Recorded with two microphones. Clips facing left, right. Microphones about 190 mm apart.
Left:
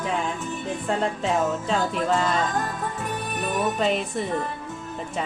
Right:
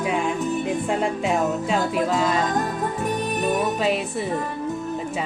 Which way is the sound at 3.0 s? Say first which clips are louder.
Right 7 dB; 20° right (ahead or behind).